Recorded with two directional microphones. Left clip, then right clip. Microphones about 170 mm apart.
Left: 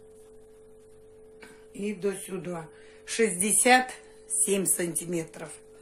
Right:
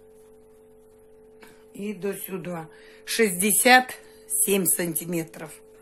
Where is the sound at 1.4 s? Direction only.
35° right (ahead or behind).